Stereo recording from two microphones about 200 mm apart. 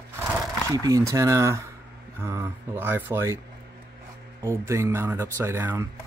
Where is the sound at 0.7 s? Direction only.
15° right (ahead or behind).